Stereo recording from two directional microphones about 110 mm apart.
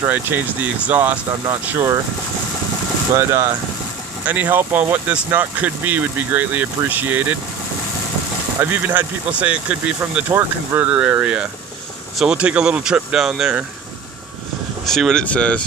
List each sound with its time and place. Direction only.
0.0 s speech: 20° right (ahead or behind)
3.2 s speech: 25° right (ahead or behind)
8.5 s speech: 15° right (ahead or behind)
14.8 s speech: 5° left (ahead or behind)